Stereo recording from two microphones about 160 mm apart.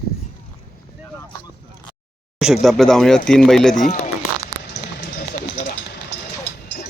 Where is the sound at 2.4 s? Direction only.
5° right (ahead or behind).